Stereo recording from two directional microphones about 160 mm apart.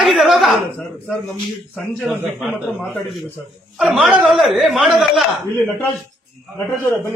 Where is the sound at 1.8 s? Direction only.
Centre (ahead or behind).